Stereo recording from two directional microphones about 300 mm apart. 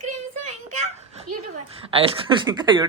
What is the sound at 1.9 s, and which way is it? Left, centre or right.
Speech, centre.